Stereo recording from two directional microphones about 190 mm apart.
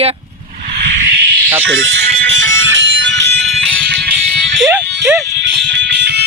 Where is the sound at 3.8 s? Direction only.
60° right (ahead or behind).